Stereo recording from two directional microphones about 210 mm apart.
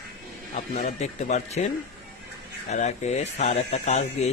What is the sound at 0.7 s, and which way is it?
Speech, 35° left (ahead or behind).